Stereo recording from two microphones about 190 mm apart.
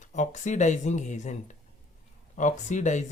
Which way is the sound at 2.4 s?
40° left (ahead or behind).